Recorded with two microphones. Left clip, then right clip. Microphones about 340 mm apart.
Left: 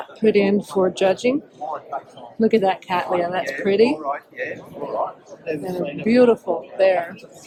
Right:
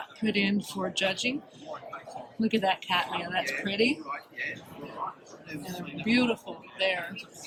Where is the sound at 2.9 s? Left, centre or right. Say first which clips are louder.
Left 6 dB; centre.